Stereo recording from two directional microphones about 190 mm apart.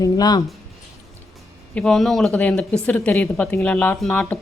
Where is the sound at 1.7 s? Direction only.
5° left (ahead or behind).